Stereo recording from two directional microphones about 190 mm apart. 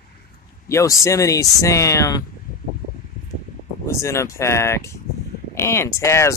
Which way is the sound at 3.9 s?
15° left (ahead or behind).